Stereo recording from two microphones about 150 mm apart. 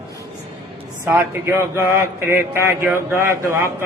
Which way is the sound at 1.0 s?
15° right (ahead or behind).